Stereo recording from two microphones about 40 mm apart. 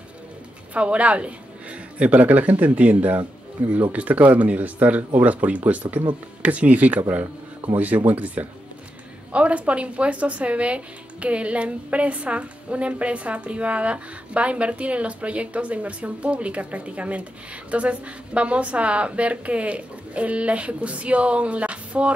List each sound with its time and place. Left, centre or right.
0.7 s speech: right
9.3 s speech: right